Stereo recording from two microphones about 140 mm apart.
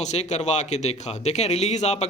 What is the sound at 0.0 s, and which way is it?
Speech, 55° left (ahead or behind).